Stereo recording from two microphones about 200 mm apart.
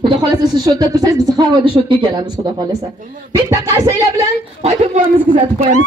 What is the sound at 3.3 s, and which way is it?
Music, 15° right (ahead or behind).